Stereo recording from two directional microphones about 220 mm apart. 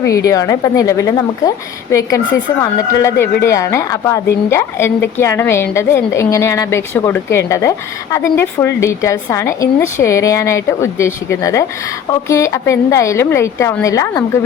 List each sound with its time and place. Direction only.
0.0 s speech: 15° left (ahead or behind)